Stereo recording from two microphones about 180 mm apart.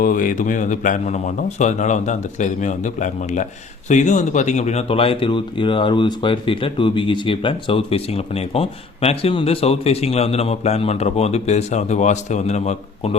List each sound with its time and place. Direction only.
0.0 s a man's voice: 50° left (ahead or behind)